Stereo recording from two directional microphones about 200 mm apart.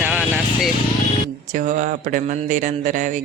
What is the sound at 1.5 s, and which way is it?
Speech, 40° right (ahead or behind).